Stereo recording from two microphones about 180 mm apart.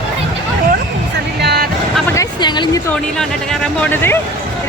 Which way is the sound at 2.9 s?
5° left (ahead or behind).